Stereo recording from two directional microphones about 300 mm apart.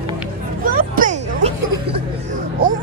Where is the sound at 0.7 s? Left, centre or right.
Right.